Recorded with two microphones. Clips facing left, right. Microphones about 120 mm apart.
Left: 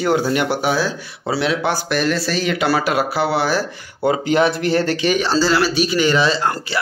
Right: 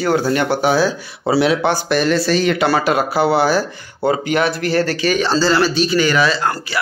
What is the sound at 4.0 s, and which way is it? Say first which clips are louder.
Speech: left 1 dB; 20° left (ahead or behind).